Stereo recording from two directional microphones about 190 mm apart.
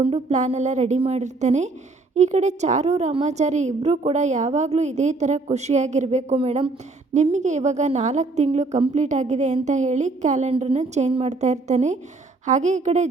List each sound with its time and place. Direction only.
0.0 s a woman's voice: 35° right (ahead or behind)